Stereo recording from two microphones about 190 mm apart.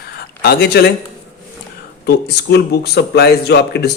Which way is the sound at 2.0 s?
60° left (ahead or behind).